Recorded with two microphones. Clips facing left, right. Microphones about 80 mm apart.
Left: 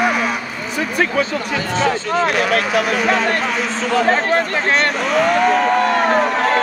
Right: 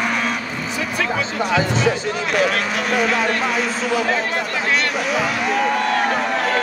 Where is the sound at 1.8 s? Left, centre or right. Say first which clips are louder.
Left 3 dB; left.